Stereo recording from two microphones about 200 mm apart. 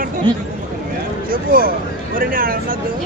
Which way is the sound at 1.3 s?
45° right (ahead or behind).